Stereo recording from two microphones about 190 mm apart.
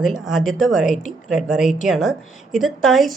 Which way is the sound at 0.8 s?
40° left (ahead or behind).